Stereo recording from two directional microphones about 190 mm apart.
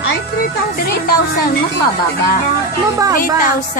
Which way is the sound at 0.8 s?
50° left (ahead or behind).